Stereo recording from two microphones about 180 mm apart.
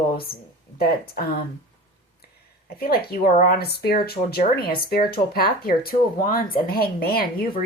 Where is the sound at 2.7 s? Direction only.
60° left (ahead or behind).